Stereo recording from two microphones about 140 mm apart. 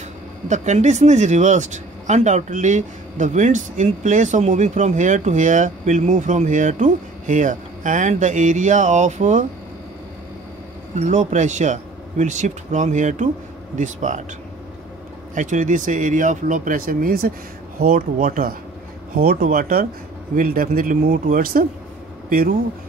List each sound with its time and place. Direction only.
0.5 s speech: 55° right (ahead or behind)
11.0 s speech: 60° right (ahead or behind)
15.3 s speech: 65° right (ahead or behind); by 22.6 s 90° right